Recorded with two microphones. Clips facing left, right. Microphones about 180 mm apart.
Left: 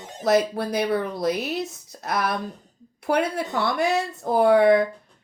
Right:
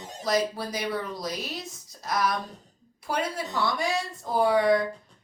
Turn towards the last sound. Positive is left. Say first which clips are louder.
# left 6 dB
turn(degrees=60)  # may be behind; listen again after turning